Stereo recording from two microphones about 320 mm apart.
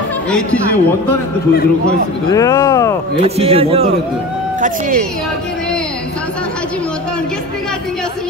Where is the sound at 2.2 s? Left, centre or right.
Centre.